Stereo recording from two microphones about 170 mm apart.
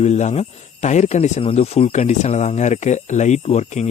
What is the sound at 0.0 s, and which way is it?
Speech, 40° left (ahead or behind).